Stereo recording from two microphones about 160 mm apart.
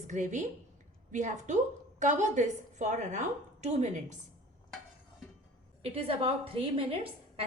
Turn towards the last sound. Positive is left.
turn(degrees=-35)  # may be behind; listen again after turning